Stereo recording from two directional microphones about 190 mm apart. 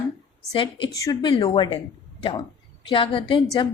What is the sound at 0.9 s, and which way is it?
Speech, 20° left (ahead or behind).